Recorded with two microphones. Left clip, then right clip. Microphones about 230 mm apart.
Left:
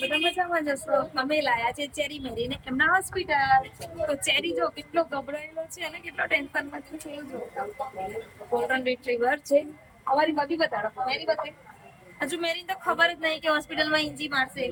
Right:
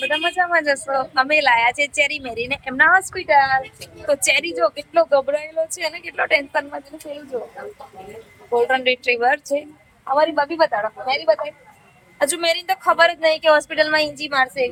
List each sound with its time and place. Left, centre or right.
0.5 s a woman's voice: centre
8.5 s a woman's voice: right
8.8 s a woman's voice: centre
10.2 s a woman's voice: centre
12.2 s a woman's voice: right